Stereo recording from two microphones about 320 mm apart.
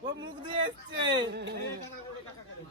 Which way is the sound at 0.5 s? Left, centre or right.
Centre.